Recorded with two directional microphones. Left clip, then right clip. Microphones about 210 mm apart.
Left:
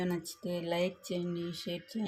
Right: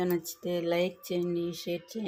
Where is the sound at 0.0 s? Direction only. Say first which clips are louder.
Right 6 dB; 15° right (ahead or behind).